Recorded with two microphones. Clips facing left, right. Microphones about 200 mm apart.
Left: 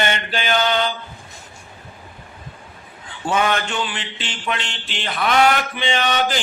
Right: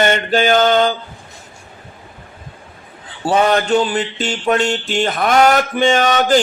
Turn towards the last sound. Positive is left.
turn(degrees=-45)  # may be behind; listen again after turning